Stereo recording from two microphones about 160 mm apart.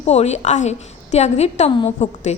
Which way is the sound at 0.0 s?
40° left (ahead or behind).